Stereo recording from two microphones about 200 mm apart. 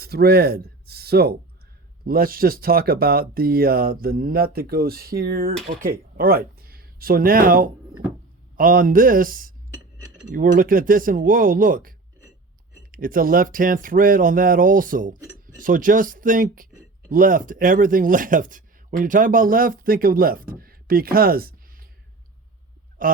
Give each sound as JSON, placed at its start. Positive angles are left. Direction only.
{"t": 0.0, "sound": "speech", "side_deg": -50}
{"t": 23.0, "sound": "speech", "side_deg": -45}